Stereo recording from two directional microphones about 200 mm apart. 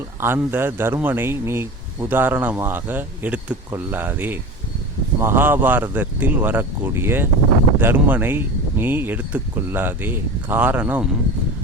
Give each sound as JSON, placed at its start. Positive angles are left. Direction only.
{"t": 0.2, "sound": "a man's voice", "side_deg": -10}